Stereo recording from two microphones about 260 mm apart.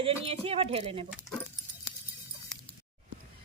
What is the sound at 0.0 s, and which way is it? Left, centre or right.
Speech, right.